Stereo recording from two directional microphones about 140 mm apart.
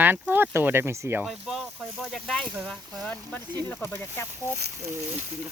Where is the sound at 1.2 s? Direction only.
Centre (ahead or behind).